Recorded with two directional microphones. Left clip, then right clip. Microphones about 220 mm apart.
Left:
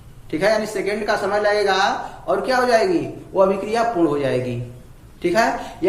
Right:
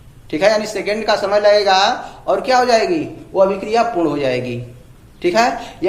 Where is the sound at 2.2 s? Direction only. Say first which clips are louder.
Right 5 dB; 20° right (ahead or behind).